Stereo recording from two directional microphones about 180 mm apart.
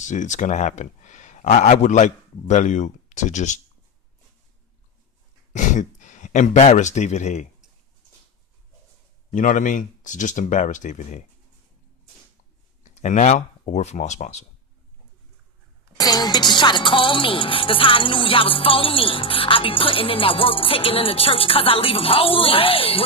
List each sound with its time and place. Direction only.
0.0 s speech: 40° left (ahead or behind)
5.5 s speech: 40° left (ahead or behind)
9.3 s speech: 45° left (ahead or behind)
12.9 s speech: 40° left (ahead or behind)
16.0 s speech: 20° left (ahead or behind)